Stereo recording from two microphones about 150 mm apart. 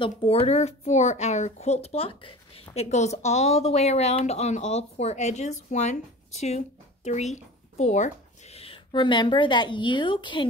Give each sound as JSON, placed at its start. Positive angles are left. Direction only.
{"t": 0.0, "sound": "speech", "side_deg": 40}